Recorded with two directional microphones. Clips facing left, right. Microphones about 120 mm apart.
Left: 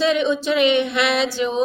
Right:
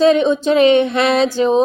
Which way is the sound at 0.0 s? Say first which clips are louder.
Right 6 dB; 40° right (ahead or behind).